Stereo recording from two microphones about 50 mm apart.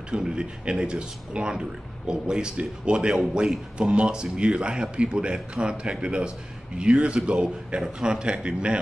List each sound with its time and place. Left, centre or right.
0.1 s a man's voice: centre